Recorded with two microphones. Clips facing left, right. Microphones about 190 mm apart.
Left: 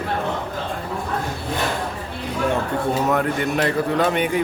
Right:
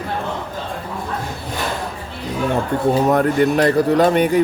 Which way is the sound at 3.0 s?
35° right (ahead or behind).